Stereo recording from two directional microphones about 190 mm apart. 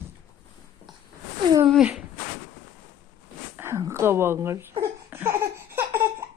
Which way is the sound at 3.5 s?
15° right (ahead or behind).